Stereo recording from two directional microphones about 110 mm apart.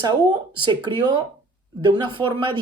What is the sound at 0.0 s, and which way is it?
Speech, 40° right (ahead or behind).